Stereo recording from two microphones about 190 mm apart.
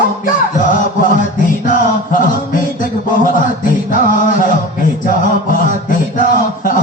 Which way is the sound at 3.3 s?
45° left (ahead or behind).